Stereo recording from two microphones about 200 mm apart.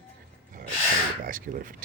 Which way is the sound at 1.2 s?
45° right (ahead or behind).